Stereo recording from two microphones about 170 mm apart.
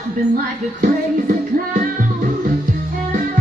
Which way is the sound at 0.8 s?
50° right (ahead or behind).